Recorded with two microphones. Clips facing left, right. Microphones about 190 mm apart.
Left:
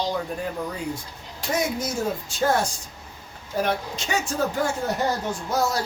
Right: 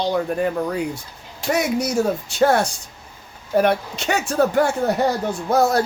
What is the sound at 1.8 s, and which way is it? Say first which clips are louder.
Speech: right 6 dB; 70° right (ahead or behind).